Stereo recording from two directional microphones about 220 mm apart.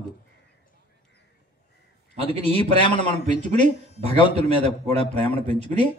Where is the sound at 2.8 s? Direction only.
20° left (ahead or behind).